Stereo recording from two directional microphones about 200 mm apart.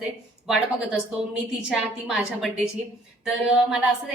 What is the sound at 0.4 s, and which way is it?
A woman's voice, 5° right (ahead or behind).